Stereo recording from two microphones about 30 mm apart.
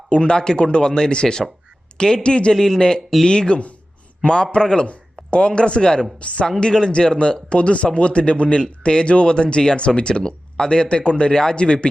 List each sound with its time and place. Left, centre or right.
0.1 s speech: left
2.6 s a man's voice: centre
6.1 s speech: left
6.6 s speech: left
7.5 s speech: left